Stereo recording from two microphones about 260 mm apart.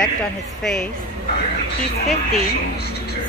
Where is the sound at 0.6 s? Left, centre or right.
Centre.